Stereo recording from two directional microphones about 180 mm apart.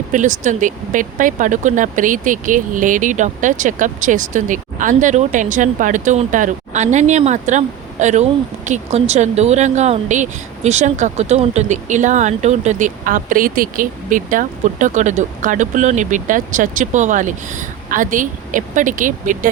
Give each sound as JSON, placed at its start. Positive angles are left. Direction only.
{"t": 0.1, "sound": "speech", "side_deg": -45}